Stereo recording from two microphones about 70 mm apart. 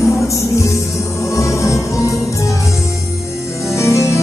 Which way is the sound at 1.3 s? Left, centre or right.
Left.